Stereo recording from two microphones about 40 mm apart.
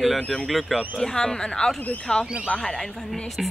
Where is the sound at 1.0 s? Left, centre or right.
Centre.